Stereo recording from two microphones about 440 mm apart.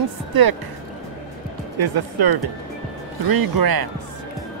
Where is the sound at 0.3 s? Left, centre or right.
Right.